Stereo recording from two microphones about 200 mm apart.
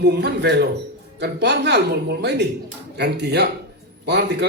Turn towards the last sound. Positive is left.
turn(degrees=-55)  # may be behind; listen again after turning